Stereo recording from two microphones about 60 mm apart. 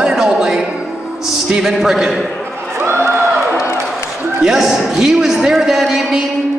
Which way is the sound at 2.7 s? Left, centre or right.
Right.